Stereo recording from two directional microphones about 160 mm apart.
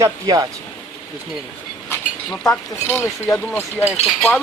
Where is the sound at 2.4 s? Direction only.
10° left (ahead or behind).